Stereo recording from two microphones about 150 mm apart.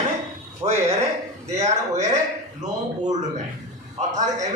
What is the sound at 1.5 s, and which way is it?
Speech, 50° right (ahead or behind).